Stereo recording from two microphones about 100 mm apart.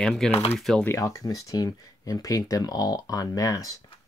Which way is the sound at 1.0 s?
35° left (ahead or behind).